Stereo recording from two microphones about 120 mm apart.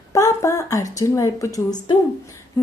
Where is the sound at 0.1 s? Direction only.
25° left (ahead or behind).